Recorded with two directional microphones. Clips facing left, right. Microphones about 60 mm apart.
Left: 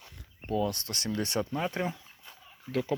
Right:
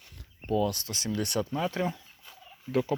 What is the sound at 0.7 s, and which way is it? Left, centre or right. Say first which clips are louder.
Speech: right 1 dB; left.